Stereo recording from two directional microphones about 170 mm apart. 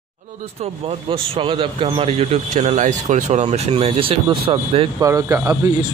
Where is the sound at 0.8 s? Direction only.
35° right (ahead or behind).